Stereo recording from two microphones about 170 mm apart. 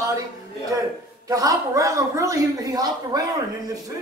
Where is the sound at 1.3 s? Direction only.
20° right (ahead or behind).